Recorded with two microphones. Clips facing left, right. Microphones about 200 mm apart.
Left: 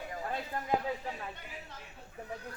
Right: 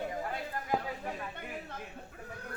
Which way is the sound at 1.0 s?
55° right (ahead or behind).